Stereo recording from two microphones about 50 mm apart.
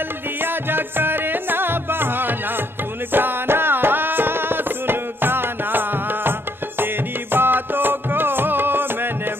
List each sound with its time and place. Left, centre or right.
0.4 s music: right